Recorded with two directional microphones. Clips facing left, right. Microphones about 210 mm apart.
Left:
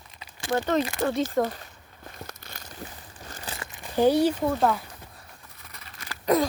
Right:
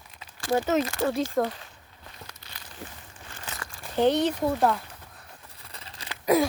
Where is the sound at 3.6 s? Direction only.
15° left (ahead or behind).